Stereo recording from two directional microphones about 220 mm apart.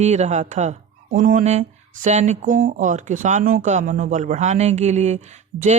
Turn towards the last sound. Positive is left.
turn(degrees=-30)  # may be behind; listen again after turning